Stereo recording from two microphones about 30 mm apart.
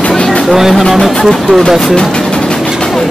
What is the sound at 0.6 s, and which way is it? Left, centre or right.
Speech, centre.